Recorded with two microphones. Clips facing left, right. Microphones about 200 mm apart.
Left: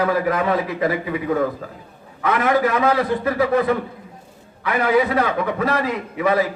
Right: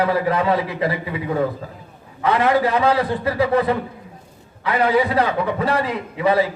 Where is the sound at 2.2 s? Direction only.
30° right (ahead or behind).